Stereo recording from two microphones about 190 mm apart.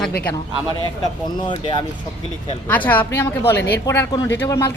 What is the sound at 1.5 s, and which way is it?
Speech, 25° left (ahead or behind).